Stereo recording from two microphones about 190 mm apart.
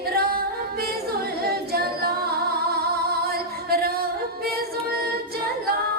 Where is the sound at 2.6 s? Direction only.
55° right (ahead or behind).